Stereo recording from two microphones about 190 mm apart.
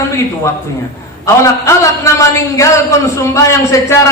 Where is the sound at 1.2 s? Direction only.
15° left (ahead or behind).